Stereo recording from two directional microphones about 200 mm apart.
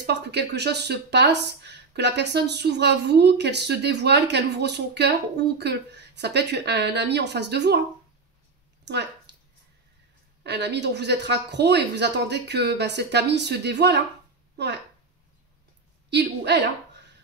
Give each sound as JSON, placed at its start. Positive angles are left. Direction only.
{"t": 0.0, "sound": "speech", "side_deg": -55}
{"t": 8.8, "sound": "a sound", "side_deg": -55}
{"t": 10.4, "sound": "speech", "side_deg": -55}
{"t": 16.1, "sound": "speech", "side_deg": -60}